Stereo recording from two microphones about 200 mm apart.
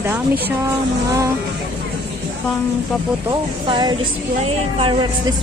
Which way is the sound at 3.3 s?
20° right (ahead or behind).